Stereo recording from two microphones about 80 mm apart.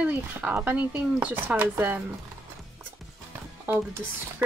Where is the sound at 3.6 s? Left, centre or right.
Right.